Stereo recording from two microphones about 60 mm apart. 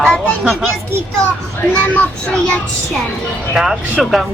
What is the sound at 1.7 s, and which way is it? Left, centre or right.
Speech, left.